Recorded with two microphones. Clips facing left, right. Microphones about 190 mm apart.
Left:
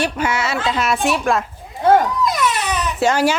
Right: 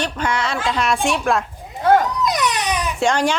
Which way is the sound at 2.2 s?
20° right (ahead or behind).